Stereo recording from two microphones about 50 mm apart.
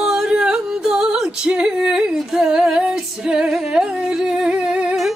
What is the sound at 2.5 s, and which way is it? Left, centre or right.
Music, centre.